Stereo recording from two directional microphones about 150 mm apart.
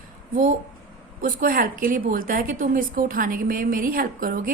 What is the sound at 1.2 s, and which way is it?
A woman's voice, 70° right (ahead or behind).